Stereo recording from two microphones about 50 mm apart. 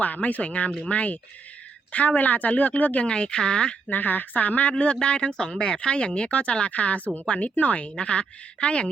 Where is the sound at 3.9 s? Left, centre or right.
Left.